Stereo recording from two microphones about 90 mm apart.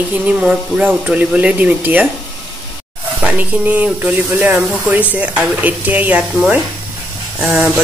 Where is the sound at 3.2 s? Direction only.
15° right (ahead or behind).